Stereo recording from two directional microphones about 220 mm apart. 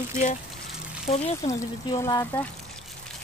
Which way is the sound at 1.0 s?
30° left (ahead or behind).